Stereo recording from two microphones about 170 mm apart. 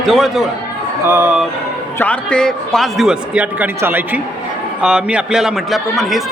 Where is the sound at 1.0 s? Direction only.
10° right (ahead or behind).